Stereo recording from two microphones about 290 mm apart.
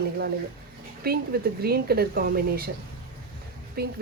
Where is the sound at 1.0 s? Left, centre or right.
Right.